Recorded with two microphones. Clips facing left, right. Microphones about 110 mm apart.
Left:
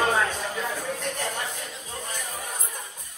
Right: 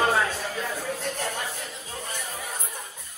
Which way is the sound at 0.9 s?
10° right (ahead or behind).